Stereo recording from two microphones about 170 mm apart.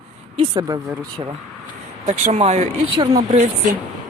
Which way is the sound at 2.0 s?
45° right (ahead or behind).